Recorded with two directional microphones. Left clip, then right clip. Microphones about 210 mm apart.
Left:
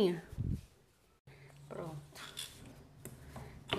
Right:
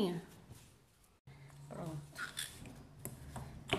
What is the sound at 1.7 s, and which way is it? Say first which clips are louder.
Dog: left 3 dB; 50° left (ahead or behind).